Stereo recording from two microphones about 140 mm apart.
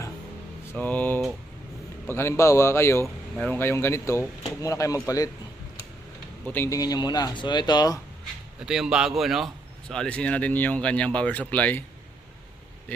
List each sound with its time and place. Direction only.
0.7 s speech: 10° left (ahead or behind)
6.4 s speech: 15° left (ahead or behind)
8.6 s speech: 5° right (ahead or behind); by 11.8 s 10° left (ahead or behind)